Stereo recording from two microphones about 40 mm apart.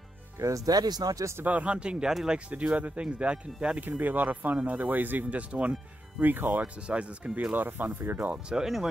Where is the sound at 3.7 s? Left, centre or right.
Right.